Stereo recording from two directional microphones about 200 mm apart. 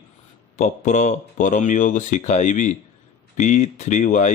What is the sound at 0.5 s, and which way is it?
Speech, 40° left (ahead or behind).